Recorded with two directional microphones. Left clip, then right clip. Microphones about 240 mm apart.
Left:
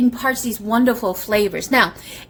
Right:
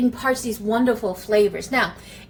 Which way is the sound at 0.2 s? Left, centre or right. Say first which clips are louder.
Left 1 dB; left.